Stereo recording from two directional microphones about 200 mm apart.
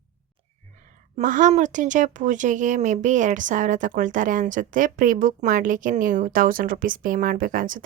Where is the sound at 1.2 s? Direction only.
40° right (ahead or behind).